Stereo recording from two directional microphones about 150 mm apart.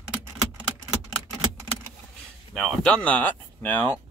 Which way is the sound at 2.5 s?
Centre (ahead or behind).